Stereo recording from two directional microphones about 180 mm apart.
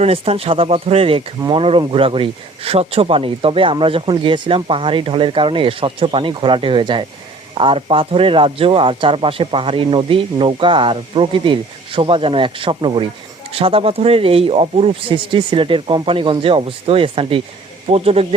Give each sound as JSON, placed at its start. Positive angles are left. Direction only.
{"t": 0.0, "sound": "speech", "side_deg": -35}